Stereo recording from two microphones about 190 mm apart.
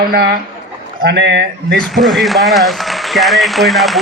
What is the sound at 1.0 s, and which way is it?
Speech, 65° right (ahead or behind).